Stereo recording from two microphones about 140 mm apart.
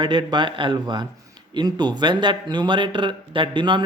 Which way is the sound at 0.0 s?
35° right (ahead or behind).